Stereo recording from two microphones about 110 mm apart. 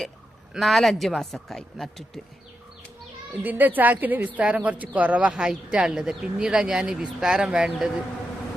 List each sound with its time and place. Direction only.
0.5 s a man's voice: centre (ahead or behind)
3.4 s speech: 15° right (ahead or behind)